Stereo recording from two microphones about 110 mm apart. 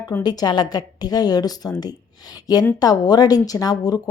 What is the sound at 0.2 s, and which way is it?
A woman's voice, 40° left (ahead or behind).